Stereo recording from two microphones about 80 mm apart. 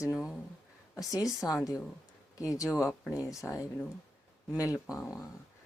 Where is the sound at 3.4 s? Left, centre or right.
Left.